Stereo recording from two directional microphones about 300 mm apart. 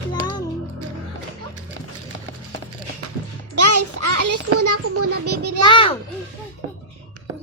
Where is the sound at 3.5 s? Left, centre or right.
Right.